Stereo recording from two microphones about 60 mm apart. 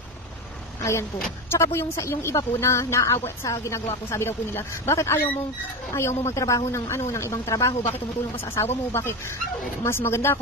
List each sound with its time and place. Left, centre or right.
1.5 s speech: left
8.5 s speech: left